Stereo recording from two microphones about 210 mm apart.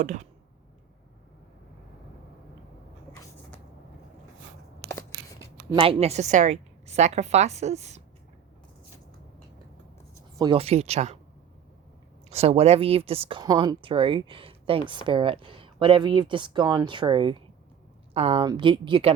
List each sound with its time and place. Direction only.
0.0 s a woman's voice: 35° right (ahead or behind)
5.7 s a woman's voice: 25° right (ahead or behind)
10.3 s speech: 20° right (ahead or behind)
12.3 s speech: 30° right (ahead or behind)